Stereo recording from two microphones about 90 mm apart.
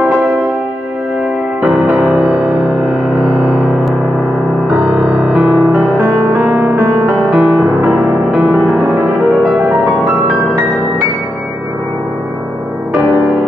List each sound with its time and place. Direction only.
1.6 s music: 15° right (ahead or behind)
4.7 s music: 5° right (ahead or behind)
6.5 s music: 30° right (ahead or behind)
7.3 s music: 10° right (ahead or behind)